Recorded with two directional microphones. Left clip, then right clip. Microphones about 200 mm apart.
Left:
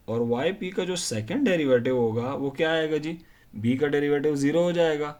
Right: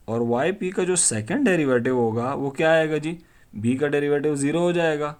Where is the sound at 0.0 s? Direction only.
40° right (ahead or behind).